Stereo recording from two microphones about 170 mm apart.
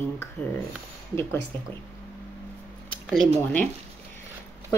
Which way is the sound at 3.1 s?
5° left (ahead or behind).